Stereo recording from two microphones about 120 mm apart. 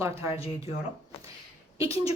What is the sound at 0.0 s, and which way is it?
Speech, 25° right (ahead or behind).